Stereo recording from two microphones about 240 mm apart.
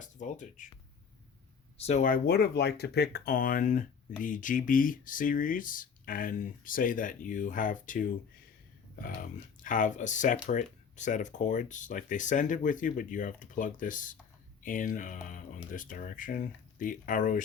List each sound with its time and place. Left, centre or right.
0.0 s speech: left
1.9 s speech: left